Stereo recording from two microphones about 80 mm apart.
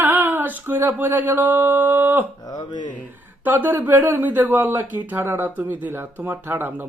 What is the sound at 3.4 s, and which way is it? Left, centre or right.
Speech, right.